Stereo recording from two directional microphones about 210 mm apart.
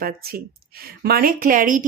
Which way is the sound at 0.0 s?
45° right (ahead or behind).